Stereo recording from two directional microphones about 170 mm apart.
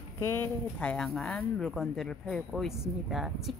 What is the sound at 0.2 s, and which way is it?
Speech, 15° left (ahead or behind).